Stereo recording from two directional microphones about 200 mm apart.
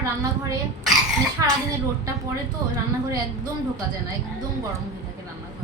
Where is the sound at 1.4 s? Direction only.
15° right (ahead or behind).